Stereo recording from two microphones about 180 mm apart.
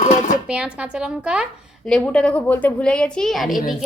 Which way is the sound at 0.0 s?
45° left (ahead or behind).